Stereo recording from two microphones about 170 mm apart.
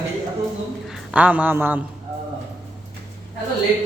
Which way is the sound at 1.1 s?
10° right (ahead or behind).